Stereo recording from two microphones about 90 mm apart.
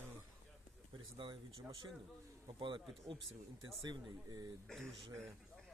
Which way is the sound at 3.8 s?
55° right (ahead or behind).